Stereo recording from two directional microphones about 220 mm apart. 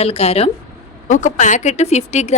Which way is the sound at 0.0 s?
30° left (ahead or behind).